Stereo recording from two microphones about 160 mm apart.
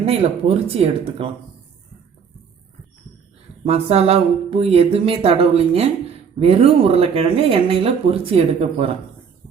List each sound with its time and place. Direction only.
0.0 s speech: 40° right (ahead or behind)
3.7 s speech: 40° right (ahead or behind)